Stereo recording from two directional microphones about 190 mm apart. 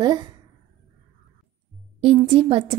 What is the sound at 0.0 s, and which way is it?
Speech, 20° right (ahead or behind).